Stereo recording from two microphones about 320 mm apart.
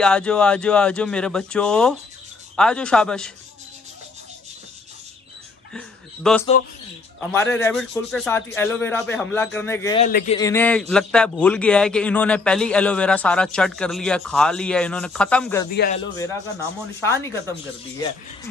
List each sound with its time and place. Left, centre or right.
0.0 s a man's voice: centre
5.7 s a sound: centre
7.2 s a man's voice: centre
10.0 s a man's voice: left
10.3 s a man's voice: centre
15.7 s a man's voice: left
17.1 s a man's voice: centre